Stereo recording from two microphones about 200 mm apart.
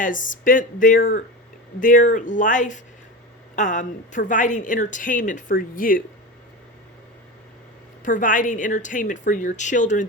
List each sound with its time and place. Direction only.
0.0 s a woman's voice: 40° left (ahead or behind)
8.0 s a woman's voice: 40° left (ahead or behind)